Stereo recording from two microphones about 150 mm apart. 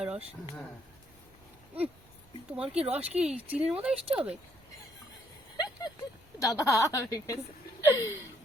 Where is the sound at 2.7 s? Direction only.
45° right (ahead or behind).